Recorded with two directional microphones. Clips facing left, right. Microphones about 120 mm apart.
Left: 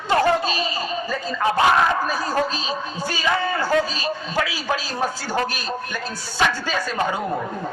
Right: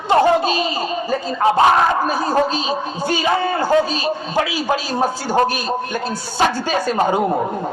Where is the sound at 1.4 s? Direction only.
35° right (ahead or behind).